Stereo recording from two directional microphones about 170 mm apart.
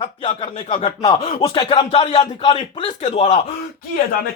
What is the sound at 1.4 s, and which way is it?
Speech, 25° left (ahead or behind).